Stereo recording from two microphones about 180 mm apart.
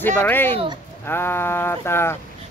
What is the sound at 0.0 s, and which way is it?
Speech, 10° left (ahead or behind).